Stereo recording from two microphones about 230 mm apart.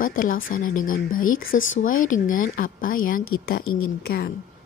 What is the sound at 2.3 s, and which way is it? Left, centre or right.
Speech, left.